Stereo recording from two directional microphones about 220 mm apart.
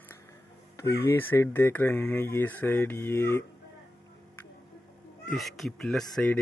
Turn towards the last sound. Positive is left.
turn(degrees=0)  # may be behind; listen again after turning